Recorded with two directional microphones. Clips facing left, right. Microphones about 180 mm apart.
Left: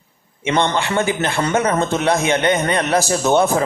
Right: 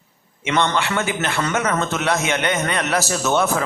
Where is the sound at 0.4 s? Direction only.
25° left (ahead or behind).